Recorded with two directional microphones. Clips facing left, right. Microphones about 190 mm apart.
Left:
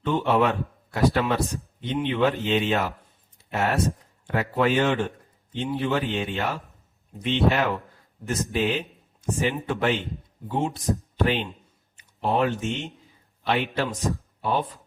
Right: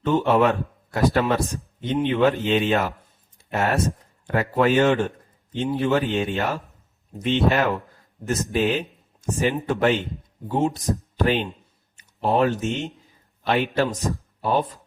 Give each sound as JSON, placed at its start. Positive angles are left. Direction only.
{"t": 0.0, "sound": "a man's voice", "side_deg": -45}